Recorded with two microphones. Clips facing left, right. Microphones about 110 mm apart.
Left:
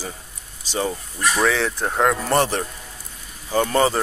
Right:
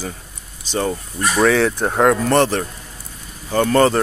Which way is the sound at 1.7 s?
25° right (ahead or behind).